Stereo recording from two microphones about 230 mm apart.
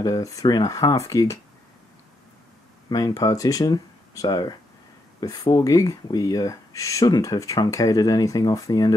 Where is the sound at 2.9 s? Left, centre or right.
Centre.